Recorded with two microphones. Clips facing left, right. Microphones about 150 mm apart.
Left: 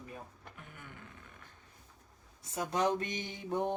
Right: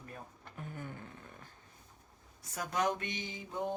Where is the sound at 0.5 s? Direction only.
35° right (ahead or behind).